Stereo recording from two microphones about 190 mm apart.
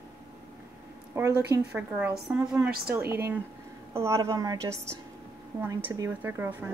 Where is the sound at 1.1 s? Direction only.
15° right (ahead or behind).